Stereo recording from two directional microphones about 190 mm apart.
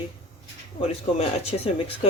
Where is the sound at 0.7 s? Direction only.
35° left (ahead or behind).